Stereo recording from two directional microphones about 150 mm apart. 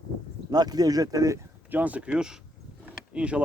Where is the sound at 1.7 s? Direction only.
10° right (ahead or behind).